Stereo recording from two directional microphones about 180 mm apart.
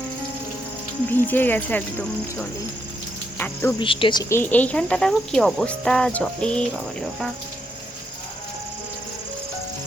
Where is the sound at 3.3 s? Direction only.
10° left (ahead or behind).